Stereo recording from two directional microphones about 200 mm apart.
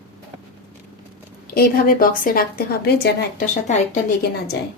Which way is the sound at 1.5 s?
45° left (ahead or behind).